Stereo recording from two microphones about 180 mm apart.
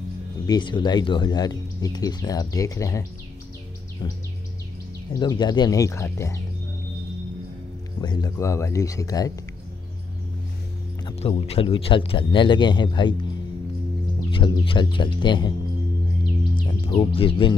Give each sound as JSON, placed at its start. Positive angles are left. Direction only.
{"t": 0.5, "sound": "speech", "side_deg": 25}
{"t": 5.2, "sound": "speech", "side_deg": 25}
{"t": 8.0, "sound": "speech", "side_deg": 20}
{"t": 11.1, "sound": "speech", "side_deg": 35}
{"t": 14.3, "sound": "speech", "side_deg": 30}
{"t": 16.5, "sound": "speech", "side_deg": 30}